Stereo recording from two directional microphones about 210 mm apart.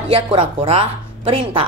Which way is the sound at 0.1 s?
25° right (ahead or behind).